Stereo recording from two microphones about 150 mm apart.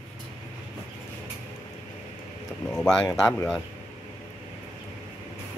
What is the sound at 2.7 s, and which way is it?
Speech, 5° left (ahead or behind).